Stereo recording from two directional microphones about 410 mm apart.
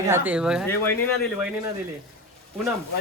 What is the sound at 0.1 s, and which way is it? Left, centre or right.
Speech, centre.